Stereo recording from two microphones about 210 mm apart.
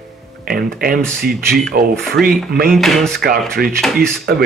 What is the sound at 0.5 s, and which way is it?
Speech, 45° right (ahead or behind).